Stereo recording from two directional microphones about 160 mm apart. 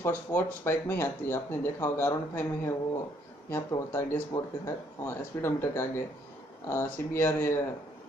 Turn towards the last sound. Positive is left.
turn(degrees=15)  # may be behind; listen again after turning